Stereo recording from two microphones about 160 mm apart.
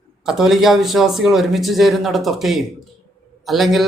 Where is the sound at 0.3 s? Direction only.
Centre (ahead or behind).